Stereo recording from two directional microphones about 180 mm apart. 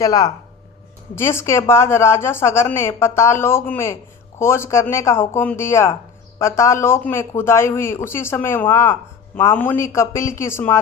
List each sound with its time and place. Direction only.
0.0 s speech: 20° left (ahead or behind)